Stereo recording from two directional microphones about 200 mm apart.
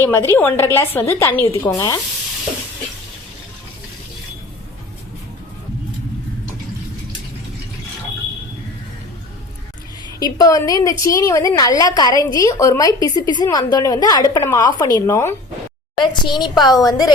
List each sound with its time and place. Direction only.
0.0 s a woman's voice: 15° left (ahead or behind)
10.3 s a woman's voice: 15° left (ahead or behind)